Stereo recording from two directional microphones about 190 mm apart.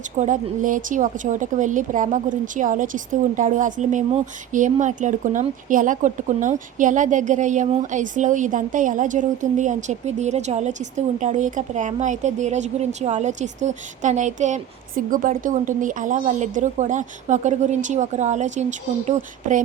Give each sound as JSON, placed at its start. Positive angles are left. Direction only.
{"t": 0.2, "sound": "a woman's voice", "side_deg": -40}